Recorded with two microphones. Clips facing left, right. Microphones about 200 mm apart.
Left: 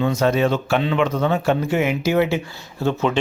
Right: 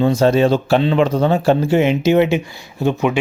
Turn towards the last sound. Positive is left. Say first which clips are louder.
# right 3 dB
turn(degrees=-15)  # may be behind; listen again after turning